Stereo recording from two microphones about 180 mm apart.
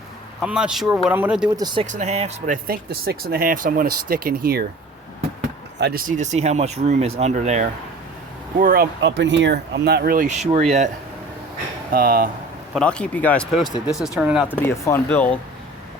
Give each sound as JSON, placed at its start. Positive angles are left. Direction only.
{"t": 0.4, "sound": "speech", "side_deg": -5}
{"t": 1.5, "sound": "speech", "side_deg": -25}
{"t": 1.9, "sound": "speech", "side_deg": -40}
{"t": 2.6, "sound": "speech", "side_deg": -60}
{"t": 5.8, "sound": "speech", "side_deg": -55}
{"t": 8.5, "sound": "speech", "side_deg": -50}
{"t": 9.0, "sound": "speech", "side_deg": -80}
{"t": 11.9, "sound": "speech", "side_deg": -55}
{"t": 12.7, "sound": "speech", "side_deg": 5}
{"t": 14.4, "sound": "speech", "side_deg": 10}